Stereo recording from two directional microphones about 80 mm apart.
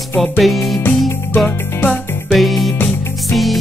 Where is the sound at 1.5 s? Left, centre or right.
Left.